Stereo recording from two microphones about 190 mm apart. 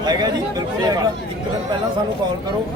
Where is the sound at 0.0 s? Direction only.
20° right (ahead or behind).